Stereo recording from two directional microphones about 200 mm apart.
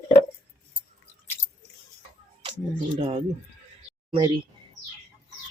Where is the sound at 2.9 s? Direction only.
35° right (ahead or behind).